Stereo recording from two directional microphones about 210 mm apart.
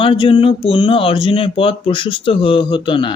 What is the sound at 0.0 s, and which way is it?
Speech, 25° left (ahead or behind).